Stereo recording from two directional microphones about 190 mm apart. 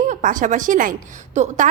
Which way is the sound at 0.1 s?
45° right (ahead or behind).